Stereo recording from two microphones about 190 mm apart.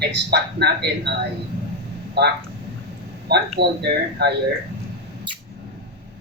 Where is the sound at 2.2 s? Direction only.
60° right (ahead or behind).